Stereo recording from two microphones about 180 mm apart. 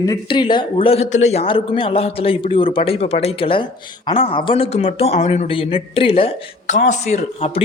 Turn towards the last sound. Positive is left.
turn(degrees=35)  # may be behind; listen again after turning